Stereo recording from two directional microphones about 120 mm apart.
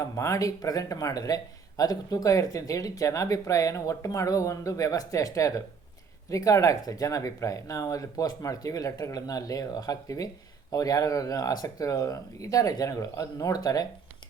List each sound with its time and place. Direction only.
0.0 s speech: 25° left (ahead or behind)